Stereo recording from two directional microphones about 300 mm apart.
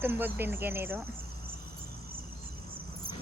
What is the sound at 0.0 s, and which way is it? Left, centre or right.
Speech, centre.